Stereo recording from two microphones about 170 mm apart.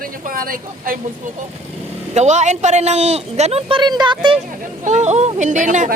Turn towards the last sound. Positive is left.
turn(degrees=-45)  # may be behind; listen again after turning